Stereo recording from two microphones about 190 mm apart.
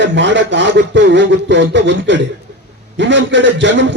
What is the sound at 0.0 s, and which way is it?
A man's voice, 70° right (ahead or behind).